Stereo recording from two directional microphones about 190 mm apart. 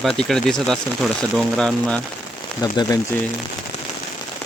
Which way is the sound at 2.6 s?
20° left (ahead or behind).